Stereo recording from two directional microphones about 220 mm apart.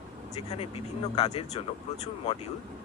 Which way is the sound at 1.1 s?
30° left (ahead or behind).